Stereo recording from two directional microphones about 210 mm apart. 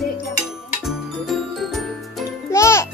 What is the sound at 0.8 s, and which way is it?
Jingle, centre (ahead or behind).